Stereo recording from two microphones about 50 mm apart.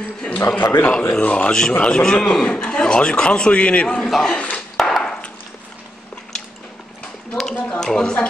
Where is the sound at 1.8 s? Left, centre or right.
Centre.